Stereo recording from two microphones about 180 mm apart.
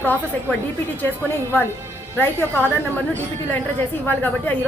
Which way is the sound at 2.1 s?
10° left (ahead or behind).